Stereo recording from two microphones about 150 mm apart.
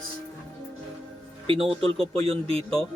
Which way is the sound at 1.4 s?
35° right (ahead or behind).